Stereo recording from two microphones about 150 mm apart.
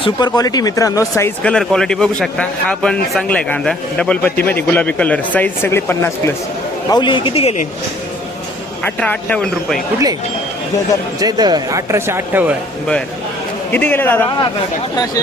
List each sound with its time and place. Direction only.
0.0 s speech: 25° left (ahead or behind)
1.5 s speech: 5° left (ahead or behind)
6.9 s a man's voice: 30° left (ahead or behind)
8.8 s speech: 10° left (ahead or behind)
11.2 s speech: 25° right (ahead or behind)
13.7 s speech: 10° left (ahead or behind)
14.9 s speech: 25° left (ahead or behind)